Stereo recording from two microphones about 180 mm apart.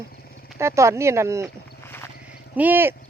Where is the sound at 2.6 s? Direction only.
10° right (ahead or behind).